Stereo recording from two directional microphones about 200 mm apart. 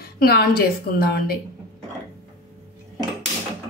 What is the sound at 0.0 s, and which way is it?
A woman's voice, 50° left (ahead or behind).